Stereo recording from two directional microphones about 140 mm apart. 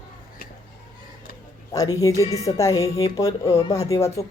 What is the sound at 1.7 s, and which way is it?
A woman's voice, 25° left (ahead or behind).